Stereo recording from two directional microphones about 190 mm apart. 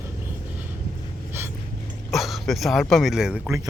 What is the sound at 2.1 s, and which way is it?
Speech, centre (ahead or behind).